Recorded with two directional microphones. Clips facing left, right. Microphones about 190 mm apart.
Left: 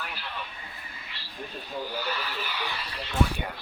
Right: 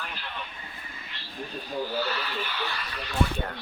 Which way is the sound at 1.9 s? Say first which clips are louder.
Right 3 dB; 10° left (ahead or behind).